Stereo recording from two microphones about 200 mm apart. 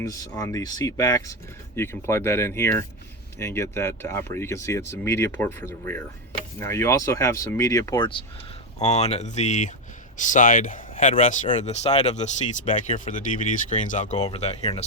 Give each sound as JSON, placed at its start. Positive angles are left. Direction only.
{"t": 0.0, "sound": "speech", "side_deg": 15}
{"t": 8.8, "sound": "speech", "side_deg": 35}